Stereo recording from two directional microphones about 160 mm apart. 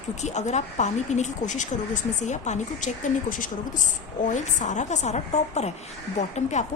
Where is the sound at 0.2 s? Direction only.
45° left (ahead or behind).